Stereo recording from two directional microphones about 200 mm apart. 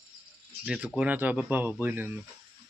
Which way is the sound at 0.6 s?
5° right (ahead or behind).